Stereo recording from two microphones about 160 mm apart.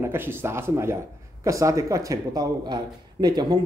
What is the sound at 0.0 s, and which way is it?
Speech, 15° right (ahead or behind).